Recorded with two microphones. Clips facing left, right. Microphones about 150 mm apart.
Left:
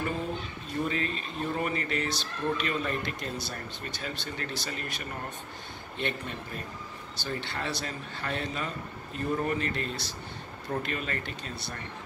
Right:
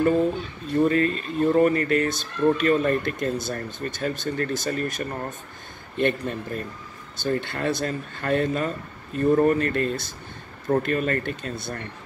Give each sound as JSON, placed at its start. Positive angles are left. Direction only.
{"t": 0.8, "sound": "a man's voice", "side_deg": -50}